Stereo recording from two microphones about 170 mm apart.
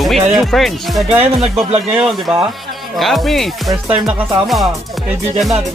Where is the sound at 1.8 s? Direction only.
5° right (ahead or behind).